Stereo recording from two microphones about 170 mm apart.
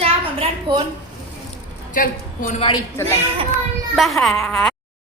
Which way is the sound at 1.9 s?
50° left (ahead or behind).